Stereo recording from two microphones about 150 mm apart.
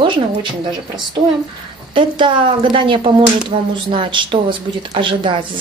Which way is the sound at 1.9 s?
35° right (ahead or behind).